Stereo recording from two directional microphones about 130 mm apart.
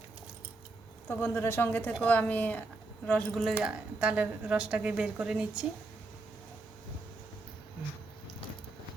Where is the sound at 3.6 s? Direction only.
10° right (ahead or behind).